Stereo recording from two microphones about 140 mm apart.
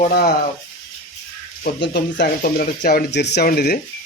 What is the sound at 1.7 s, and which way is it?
Speech, 90° left.